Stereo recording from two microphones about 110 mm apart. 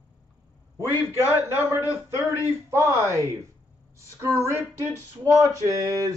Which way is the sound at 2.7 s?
25° right (ahead or behind).